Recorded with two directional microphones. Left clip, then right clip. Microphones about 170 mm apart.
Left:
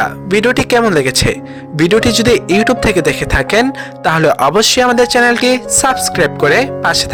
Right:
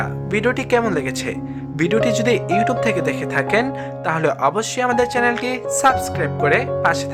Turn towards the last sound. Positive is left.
turn(degrees=35)  # may be behind; listen again after turning